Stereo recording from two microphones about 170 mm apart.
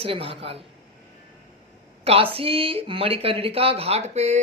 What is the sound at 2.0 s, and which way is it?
A woman's voice, 35° right (ahead or behind).